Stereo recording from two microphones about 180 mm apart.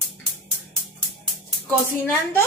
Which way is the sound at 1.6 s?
10° left (ahead or behind).